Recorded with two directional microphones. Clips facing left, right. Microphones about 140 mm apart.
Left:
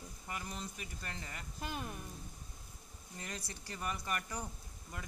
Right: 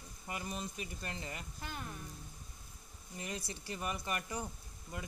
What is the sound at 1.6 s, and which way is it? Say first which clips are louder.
Speech: left 6 dB; 15° left (ahead or behind).